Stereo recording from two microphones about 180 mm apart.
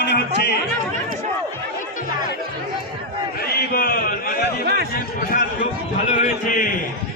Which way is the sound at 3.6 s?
60° left (ahead or behind).